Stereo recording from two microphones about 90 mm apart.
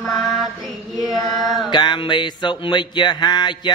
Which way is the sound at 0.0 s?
Centre (ahead or behind).